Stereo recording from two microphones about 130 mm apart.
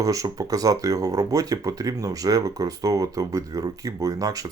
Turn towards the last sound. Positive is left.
turn(degrees=-30)  # may be behind; listen again after turning